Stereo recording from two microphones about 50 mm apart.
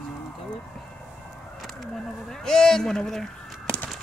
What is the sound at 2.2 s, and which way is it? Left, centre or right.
Speech, centre.